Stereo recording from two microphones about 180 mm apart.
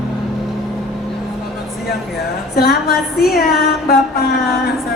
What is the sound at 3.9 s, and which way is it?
Mantra, 55° left (ahead or behind).